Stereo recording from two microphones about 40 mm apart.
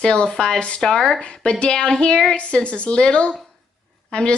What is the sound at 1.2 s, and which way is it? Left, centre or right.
Speech, left.